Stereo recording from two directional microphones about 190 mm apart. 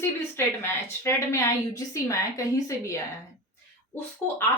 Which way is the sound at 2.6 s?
15° left (ahead or behind).